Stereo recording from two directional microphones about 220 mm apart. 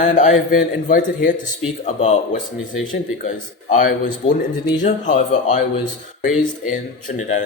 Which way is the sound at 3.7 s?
40° left (ahead or behind).